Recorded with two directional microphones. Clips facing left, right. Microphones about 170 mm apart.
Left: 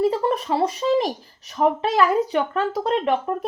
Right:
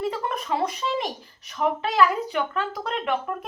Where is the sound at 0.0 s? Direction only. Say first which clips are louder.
Left 7 dB; 35° left (ahead or behind).